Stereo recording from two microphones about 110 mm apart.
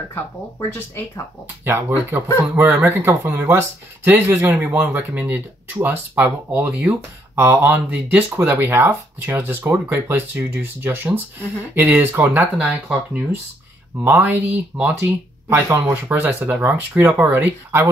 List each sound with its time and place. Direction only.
1.6 s speech: 20° right (ahead or behind)